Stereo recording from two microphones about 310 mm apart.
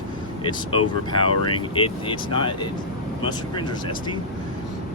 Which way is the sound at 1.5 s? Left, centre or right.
Centre.